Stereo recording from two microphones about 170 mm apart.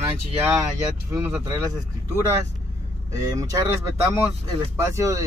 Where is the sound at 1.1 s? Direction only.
15° right (ahead or behind).